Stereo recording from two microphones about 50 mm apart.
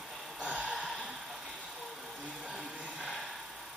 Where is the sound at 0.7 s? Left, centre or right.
Centre.